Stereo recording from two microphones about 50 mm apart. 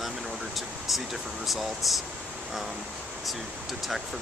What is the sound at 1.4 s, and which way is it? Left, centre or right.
Speech, centre.